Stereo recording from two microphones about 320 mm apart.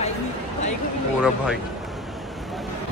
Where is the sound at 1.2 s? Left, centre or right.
Centre.